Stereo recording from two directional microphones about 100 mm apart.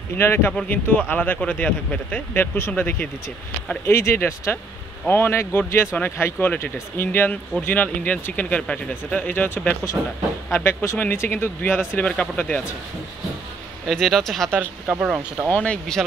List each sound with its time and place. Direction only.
0.2 s speech: 20° left (ahead or behind)
3.8 s speech: 25° left (ahead or behind)
13.8 s speech: 5° left (ahead or behind)
14.9 s speech: 10° right (ahead or behind)
15.5 s speech: 10° left (ahead or behind)